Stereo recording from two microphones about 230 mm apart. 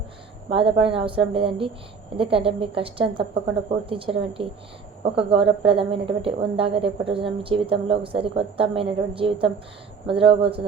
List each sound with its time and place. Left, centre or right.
0.5 s a woman's voice: right